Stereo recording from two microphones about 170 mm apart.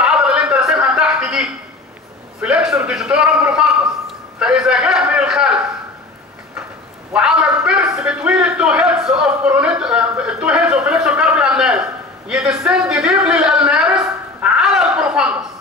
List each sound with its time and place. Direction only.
0.0 s a sound: 5° right (ahead or behind)
2.4 s a man's voice: 5° right (ahead or behind)
7.1 s a man's voice: 5° right (ahead or behind)